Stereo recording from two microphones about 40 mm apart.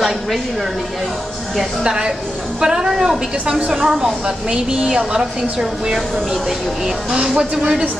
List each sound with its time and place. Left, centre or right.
1.8 s a woman's voice: right
2.6 s a sound: centre
3.4 s a woman's voice: right
7.2 s speech: centre